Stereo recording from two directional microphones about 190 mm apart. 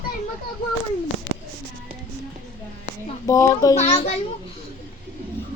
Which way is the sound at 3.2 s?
15° left (ahead or behind).